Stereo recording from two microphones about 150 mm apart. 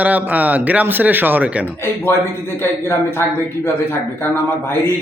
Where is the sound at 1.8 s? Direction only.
15° left (ahead or behind).